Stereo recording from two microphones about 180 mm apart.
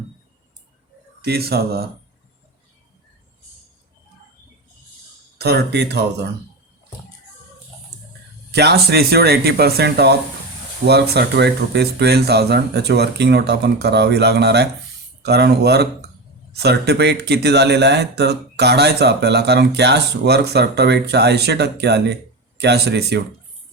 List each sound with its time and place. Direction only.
1.2 s speech: 60° right (ahead or behind)
5.4 s speech: 65° right (ahead or behind)
8.5 s speech: 65° right (ahead or behind)